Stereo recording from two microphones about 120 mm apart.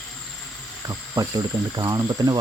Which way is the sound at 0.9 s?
35° right (ahead or behind).